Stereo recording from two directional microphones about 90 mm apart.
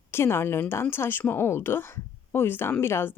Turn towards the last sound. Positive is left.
turn(degrees=25)  # may be behind; listen again after turning